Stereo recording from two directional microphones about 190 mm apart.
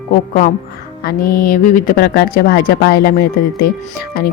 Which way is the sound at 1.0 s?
50° left (ahead or behind).